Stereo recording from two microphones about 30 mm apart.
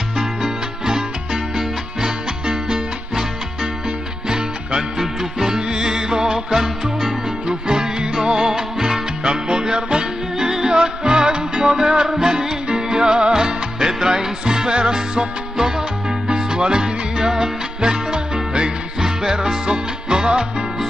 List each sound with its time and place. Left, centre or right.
0.2 s music: right
4.3 s music: centre
10.4 s music: centre
16.3 s music: right